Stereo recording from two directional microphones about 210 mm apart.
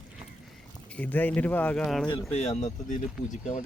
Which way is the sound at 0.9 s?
5° left (ahead or behind).